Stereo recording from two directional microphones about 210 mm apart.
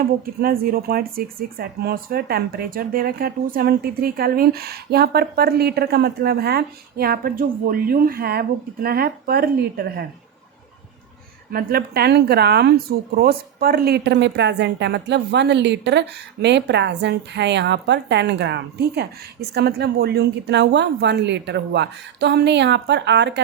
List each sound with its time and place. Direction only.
0.0 s speech: 45° right (ahead or behind)
11.5 s speech: 45° right (ahead or behind)